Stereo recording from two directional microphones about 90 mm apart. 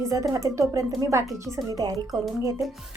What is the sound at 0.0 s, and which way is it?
A woman's voice, 35° right (ahead or behind).